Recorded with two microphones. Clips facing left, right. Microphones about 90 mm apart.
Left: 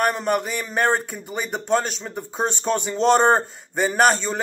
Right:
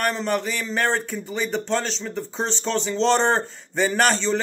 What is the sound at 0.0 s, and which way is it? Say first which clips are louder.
A man's voice: left 2 dB; 10° left (ahead or behind).